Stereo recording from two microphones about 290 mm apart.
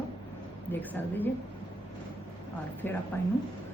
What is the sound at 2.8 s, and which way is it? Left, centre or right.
Speech, centre.